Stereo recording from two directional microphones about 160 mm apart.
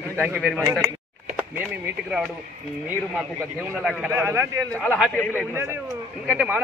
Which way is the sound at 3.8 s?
Centre (ahead or behind).